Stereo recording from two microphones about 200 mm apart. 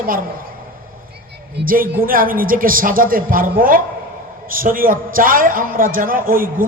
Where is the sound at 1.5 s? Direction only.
45° right (ahead or behind).